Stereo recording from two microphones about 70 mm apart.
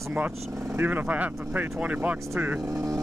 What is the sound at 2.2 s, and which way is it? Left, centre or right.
Speech, right.